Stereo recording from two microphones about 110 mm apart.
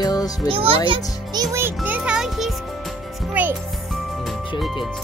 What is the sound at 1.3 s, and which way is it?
Speech, 35° right (ahead or behind).